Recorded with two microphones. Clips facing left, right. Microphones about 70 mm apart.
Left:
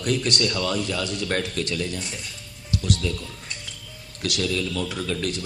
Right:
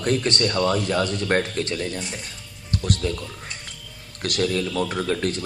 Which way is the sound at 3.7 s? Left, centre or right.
Right.